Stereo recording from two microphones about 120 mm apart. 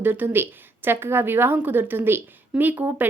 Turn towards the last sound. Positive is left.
turn(degrees=-15)  # may be behind; listen again after turning